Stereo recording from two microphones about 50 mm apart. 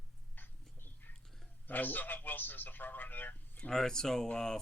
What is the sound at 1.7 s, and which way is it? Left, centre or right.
Speech, left.